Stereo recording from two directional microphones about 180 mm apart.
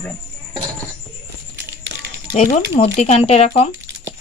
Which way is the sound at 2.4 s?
35° left (ahead or behind).